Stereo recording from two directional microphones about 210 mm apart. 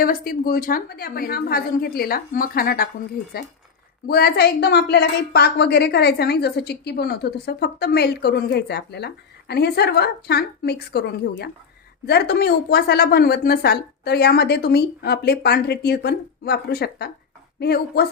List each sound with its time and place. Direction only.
0.0 s a woman's voice: 45° left (ahead or behind)
4.0 s a woman's voice: 45° left (ahead or behind)